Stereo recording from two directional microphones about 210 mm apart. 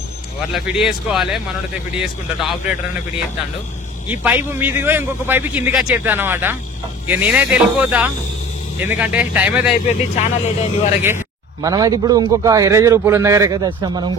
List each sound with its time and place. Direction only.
0.5 s speech: centre (ahead or behind)
4.1 s a man's voice: 10° right (ahead or behind)
9.8 s speech: 35° left (ahead or behind)
11.6 s a man's voice: 15° right (ahead or behind)